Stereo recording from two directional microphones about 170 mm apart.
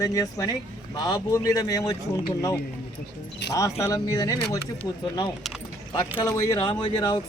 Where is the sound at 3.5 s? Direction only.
20° left (ahead or behind).